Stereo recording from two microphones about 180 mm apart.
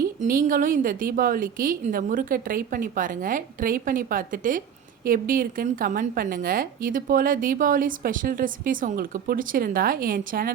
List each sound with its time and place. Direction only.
0.2 s a woman's voice: 50° right (ahead or behind)